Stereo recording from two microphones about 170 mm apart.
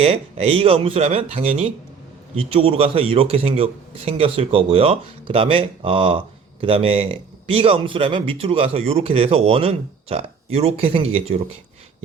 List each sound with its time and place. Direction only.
0.0 s a man's voice: 35° right (ahead or behind)